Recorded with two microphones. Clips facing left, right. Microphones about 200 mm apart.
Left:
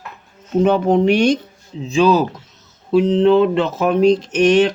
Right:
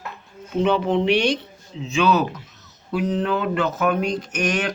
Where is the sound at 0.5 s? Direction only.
45° left (ahead or behind).